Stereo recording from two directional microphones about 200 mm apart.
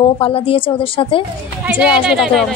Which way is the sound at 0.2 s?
25° left (ahead or behind).